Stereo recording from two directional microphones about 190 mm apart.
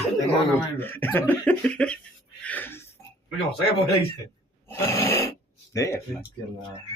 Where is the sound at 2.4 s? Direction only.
10° left (ahead or behind).